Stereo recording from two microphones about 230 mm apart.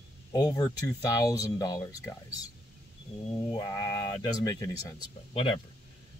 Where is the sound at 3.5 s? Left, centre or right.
Centre.